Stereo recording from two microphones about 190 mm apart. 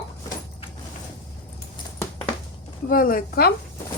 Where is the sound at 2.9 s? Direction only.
45° left (ahead or behind).